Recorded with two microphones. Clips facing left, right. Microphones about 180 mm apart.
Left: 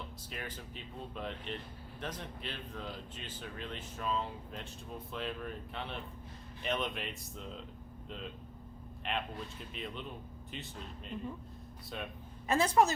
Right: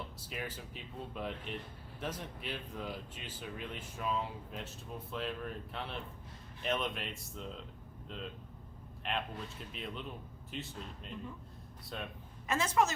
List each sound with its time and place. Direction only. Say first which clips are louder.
0.2 s speech: right 2 dB; 5° right (ahead or behind)
9.0 s speech: even; centre (ahead or behind)
12.5 s a woman's voice: left 3 dB; 35° left (ahead or behind)